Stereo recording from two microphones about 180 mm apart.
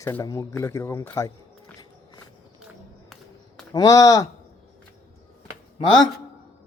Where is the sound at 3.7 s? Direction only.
20° left (ahead or behind).